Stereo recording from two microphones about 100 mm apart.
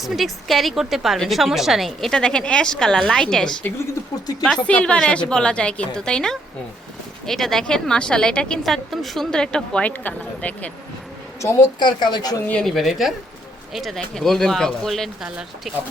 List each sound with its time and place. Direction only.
0.0 s a woman's voice: centre (ahead or behind); by 10.7 s 15° left (ahead or behind)
11.3 s a woman's voice: 30° left (ahead or behind)
11.8 s a woman's voice: 45° left (ahead or behind)
12.5 s a woman's voice: 5° left (ahead or behind)